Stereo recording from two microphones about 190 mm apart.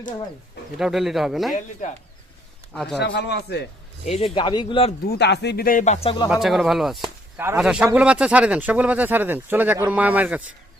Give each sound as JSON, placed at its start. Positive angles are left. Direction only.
{"t": 0.8, "sound": "speech", "side_deg": 0}
{"t": 2.7, "sound": "speech", "side_deg": 0}
{"t": 3.0, "sound": "speech", "side_deg": 60}
{"t": 4.0, "sound": "speech", "side_deg": 30}
{"t": 5.0, "sound": "speech", "side_deg": 60}
{"t": 6.2, "sound": "speech", "side_deg": -5}